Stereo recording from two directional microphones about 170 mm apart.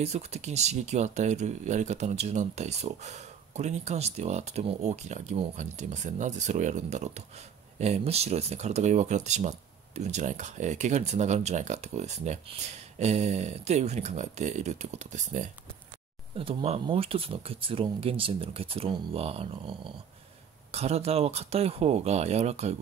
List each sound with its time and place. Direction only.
0.0 s speech: 40° right (ahead or behind)
16.3 s speech: 35° right (ahead or behind)